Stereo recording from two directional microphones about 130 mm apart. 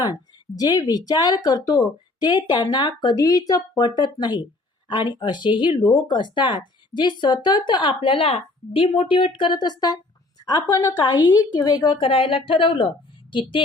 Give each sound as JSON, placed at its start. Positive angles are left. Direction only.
{"t": 0.6, "sound": "speech", "side_deg": 30}
{"t": 11.9, "sound": "speech", "side_deg": 45}